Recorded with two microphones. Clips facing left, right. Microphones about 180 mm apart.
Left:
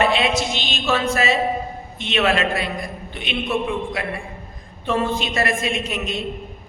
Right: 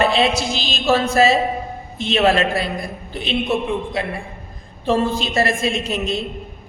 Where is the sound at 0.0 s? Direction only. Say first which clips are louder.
Right 2 dB; 30° right (ahead or behind).